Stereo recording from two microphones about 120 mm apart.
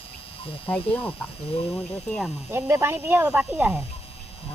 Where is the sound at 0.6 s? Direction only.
10° left (ahead or behind).